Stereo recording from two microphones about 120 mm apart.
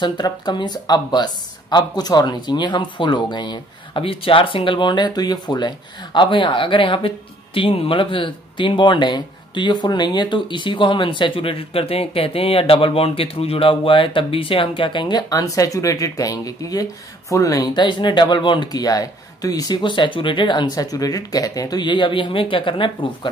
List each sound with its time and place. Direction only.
0.0 s speech: 40° left (ahead or behind)